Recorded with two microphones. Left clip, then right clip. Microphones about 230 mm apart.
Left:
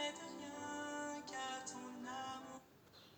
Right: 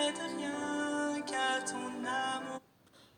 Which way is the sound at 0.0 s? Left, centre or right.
Right.